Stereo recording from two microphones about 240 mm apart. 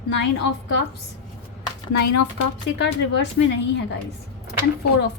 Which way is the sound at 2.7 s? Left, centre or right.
Left.